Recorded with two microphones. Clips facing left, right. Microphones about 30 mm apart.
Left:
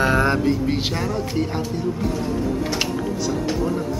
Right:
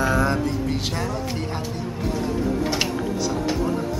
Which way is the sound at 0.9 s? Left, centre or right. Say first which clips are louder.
Left 3 dB; centre.